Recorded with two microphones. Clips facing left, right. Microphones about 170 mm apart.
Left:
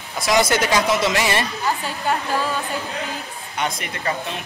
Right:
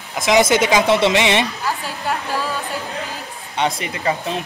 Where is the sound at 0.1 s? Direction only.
20° right (ahead or behind).